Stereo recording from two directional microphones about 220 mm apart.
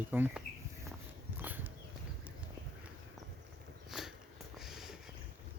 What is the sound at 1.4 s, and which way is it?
Horse, 10° right (ahead or behind).